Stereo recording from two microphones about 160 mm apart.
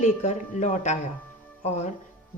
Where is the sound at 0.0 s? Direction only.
45° left (ahead or behind).